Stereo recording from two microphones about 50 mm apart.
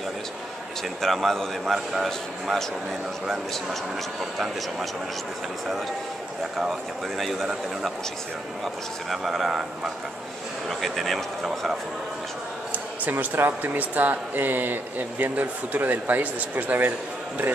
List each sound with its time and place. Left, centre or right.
1.0 s a man's voice: centre
7.2 s a man's voice: centre
9.1 s a man's voice: centre
10.7 s a man's voice: centre
13.0 s speech: right